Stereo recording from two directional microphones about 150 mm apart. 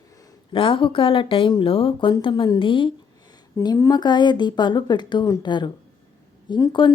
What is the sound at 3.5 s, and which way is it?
A woman's voice, 20° left (ahead or behind).